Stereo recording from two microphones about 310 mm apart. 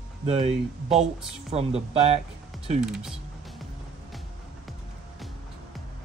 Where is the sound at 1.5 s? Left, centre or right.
Centre.